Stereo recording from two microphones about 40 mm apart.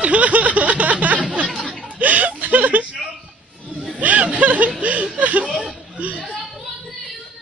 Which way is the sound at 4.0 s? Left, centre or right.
Right.